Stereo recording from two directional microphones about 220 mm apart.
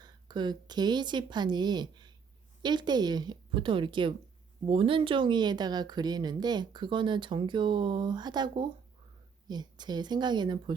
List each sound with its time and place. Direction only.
0.0 s a woman's voice: 20° right (ahead or behind)